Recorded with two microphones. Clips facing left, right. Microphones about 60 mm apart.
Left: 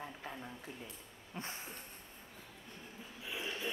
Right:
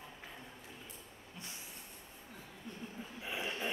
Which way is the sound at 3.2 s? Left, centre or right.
Right.